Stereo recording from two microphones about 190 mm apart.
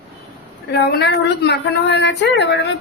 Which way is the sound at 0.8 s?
60° left (ahead or behind).